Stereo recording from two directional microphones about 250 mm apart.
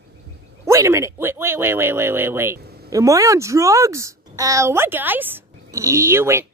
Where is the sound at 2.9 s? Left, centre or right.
Centre.